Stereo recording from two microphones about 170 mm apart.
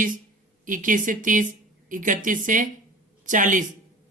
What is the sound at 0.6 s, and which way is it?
Speech, 50° right (ahead or behind).